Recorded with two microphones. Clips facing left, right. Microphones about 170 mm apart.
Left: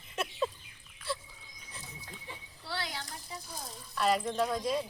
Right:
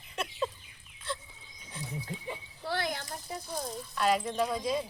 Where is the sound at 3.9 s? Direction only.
Centre (ahead or behind).